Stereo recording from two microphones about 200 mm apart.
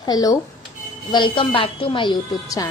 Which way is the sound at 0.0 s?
20° left (ahead or behind).